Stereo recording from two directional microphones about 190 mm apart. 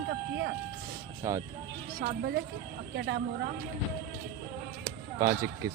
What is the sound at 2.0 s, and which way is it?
Speech, 50° right (ahead or behind).